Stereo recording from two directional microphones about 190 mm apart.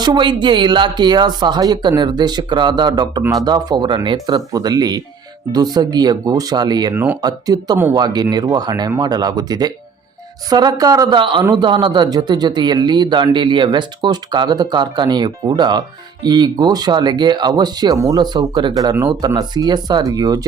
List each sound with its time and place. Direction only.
0.0 s speech: 25° right (ahead or behind)